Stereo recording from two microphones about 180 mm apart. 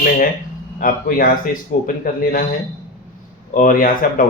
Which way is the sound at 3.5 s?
50° left (ahead or behind).